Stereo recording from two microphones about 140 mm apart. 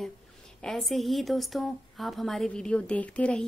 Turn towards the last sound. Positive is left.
turn(degrees=10)  # may be behind; listen again after turning